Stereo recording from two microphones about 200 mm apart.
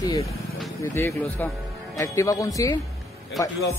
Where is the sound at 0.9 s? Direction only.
10° left (ahead or behind).